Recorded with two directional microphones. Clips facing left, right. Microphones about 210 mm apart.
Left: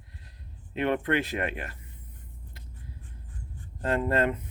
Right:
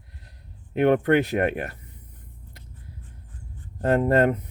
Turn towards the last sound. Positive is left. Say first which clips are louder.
# right 6 dB
turn(degrees=-45)  # may be behind; listen again after turning